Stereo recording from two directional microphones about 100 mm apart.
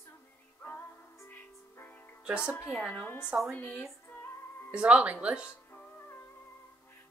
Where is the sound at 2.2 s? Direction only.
10° right (ahead or behind).